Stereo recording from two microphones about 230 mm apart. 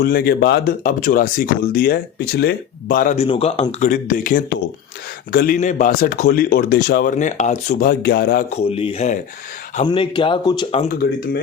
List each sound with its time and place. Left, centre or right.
0.0 s speech: left
8.4 s speech: left